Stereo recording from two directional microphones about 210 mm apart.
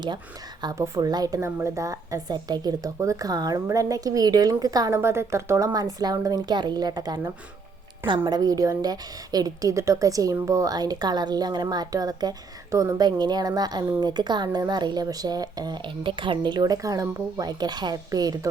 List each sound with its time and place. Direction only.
0.6 s a woman's voice: 15° right (ahead or behind)